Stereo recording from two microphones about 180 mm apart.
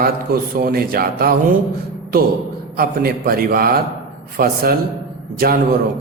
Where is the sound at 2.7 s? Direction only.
55° right (ahead or behind).